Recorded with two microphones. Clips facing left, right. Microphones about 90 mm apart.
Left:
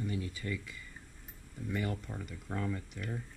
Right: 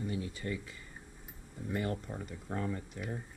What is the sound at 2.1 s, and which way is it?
Speech, 30° right (ahead or behind).